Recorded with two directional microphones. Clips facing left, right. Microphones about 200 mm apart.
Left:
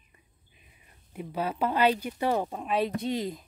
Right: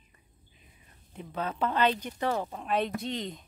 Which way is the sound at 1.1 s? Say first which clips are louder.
Left 3 dB; 10° left (ahead or behind).